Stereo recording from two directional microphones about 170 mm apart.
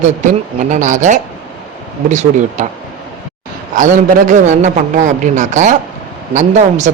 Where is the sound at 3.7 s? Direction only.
45° right (ahead or behind).